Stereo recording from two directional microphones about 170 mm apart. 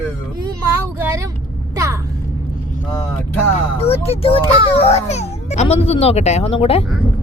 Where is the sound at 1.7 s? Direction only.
20° right (ahead or behind).